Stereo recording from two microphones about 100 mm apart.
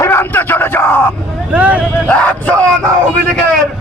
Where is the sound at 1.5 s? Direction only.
15° right (ahead or behind).